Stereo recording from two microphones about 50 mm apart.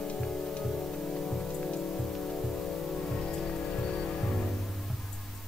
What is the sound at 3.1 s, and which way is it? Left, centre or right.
Music, left.